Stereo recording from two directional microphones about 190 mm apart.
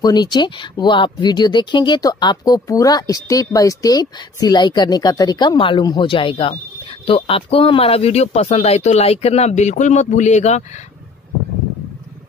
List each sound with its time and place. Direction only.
0.0 s speech: 20° left (ahead or behind); by 10.6 s 35° left (ahead or behind)